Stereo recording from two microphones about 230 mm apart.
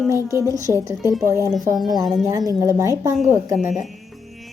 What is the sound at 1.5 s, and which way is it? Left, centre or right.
Speech, centre.